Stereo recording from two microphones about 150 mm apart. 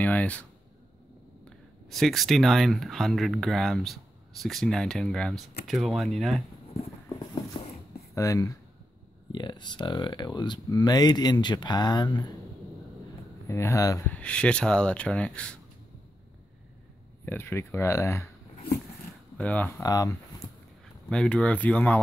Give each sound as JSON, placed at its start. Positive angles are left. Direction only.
{"t": 0.0, "sound": "speech", "side_deg": 10}
{"t": 7.5, "sound": "a sound", "side_deg": 35}
{"t": 8.1, "sound": "speech", "side_deg": 20}
{"t": 13.5, "sound": "speech", "side_deg": 20}
{"t": 14.0, "sound": "speech", "side_deg": 10}
{"t": 17.2, "sound": "speech", "side_deg": 15}
{"t": 19.3, "sound": "speech", "side_deg": 10}
{"t": 19.8, "sound": "speech", "side_deg": 25}
{"t": 21.1, "sound": "speech", "side_deg": 5}